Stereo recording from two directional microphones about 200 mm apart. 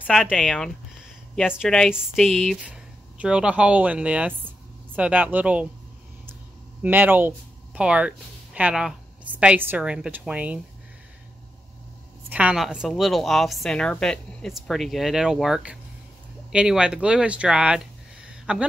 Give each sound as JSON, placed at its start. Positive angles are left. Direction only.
{"t": 0.0, "sound": "a woman's voice", "side_deg": 0}
{"t": 6.8, "sound": "a woman's voice", "side_deg": -10}
{"t": 12.3, "sound": "a woman's voice", "side_deg": -5}